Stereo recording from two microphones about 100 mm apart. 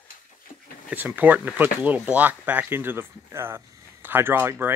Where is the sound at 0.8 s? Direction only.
20° right (ahead or behind).